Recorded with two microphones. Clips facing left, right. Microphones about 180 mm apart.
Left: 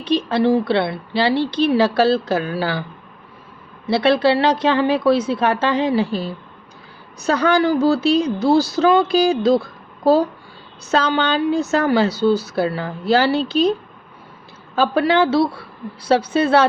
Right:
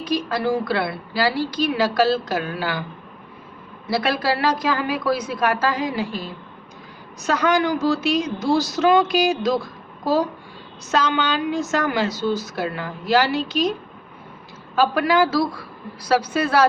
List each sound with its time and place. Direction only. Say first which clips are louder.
0.0 s a woman's voice: left 5 dB; 30° left (ahead or behind)
3.8 s a woman's voice: left 6 dB; 25° left (ahead or behind)
10.9 s a woman's voice: left 3 dB; 30° left (ahead or behind)
14.8 s a woman's voice: left 2 dB; 30° left (ahead or behind)